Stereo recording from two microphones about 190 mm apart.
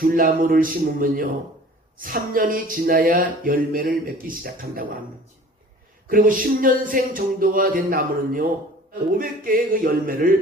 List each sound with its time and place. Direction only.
0.0 s music: 50° right (ahead or behind)
6.1 s music: 45° right (ahead or behind)